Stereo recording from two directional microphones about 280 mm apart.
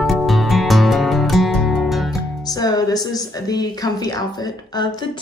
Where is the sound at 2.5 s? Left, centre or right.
Centre.